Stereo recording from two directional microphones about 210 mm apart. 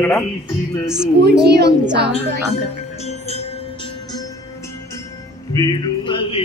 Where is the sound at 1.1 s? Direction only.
50° right (ahead or behind).